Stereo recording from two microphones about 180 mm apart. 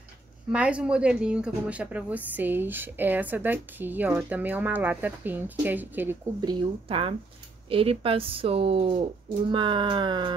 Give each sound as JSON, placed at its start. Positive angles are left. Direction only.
{"t": 0.5, "sound": "speech", "side_deg": -5}
{"t": 6.4, "sound": "speech", "side_deg": -30}
{"t": 9.5, "sound": "a sound", "side_deg": -30}